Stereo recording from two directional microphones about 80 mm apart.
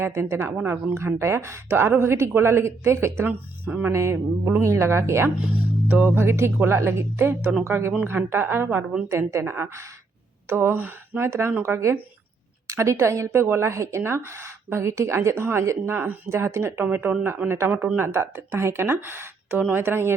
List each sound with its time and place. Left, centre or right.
0.0 s speech: right
0.9 s a woman's voice: right